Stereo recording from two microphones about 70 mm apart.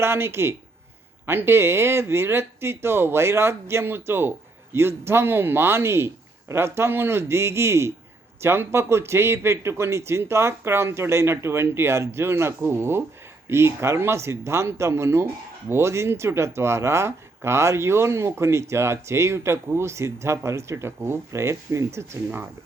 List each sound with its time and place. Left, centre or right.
0.0 s speech: right